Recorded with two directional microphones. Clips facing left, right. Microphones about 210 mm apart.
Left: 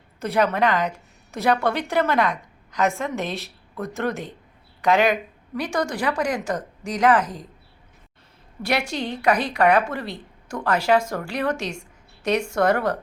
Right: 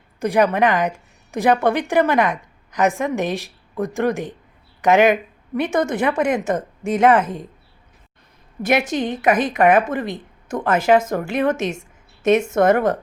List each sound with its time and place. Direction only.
0.2 s a woman's voice: 15° right (ahead or behind)
8.6 s speech: 20° right (ahead or behind)